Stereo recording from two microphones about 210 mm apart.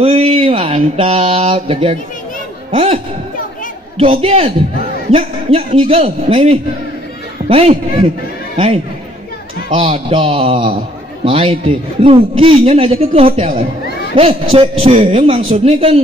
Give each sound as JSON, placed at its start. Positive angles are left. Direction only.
{"t": 0.0, "sound": "a sound", "side_deg": -30}
{"t": 2.7, "sound": "a man's voice", "side_deg": -25}
{"t": 4.0, "sound": "a man's voice", "side_deg": -25}